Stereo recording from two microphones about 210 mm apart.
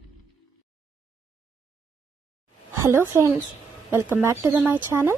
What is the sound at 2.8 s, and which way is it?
Speech, 10° right (ahead or behind).